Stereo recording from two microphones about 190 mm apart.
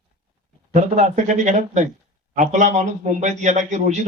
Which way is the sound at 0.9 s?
40° right (ahead or behind).